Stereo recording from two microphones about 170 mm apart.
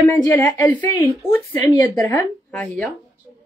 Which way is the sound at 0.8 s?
25° left (ahead or behind).